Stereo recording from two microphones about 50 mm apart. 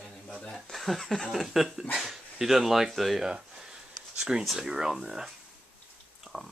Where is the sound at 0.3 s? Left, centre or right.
Centre.